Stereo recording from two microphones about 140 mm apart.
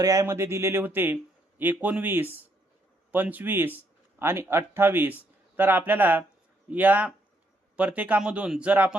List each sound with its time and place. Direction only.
0.0 s speech: 25° right (ahead or behind)